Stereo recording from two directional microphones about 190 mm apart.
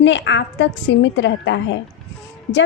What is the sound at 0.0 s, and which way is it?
A woman's voice, 70° left (ahead or behind).